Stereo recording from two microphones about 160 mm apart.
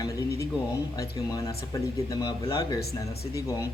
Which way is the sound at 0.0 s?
20° left (ahead or behind).